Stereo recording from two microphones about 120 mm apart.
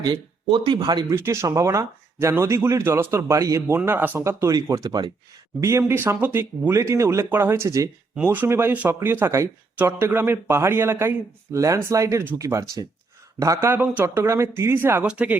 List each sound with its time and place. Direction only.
0.0 s speech: 40° right (ahead or behind)
1.1 s speech: 25° right (ahead or behind)
3.8 s speech: 15° right (ahead or behind)
8.1 s speech: 15° right (ahead or behind)